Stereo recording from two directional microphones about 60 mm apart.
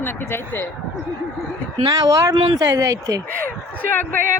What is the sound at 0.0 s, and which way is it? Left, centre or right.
Speech, left.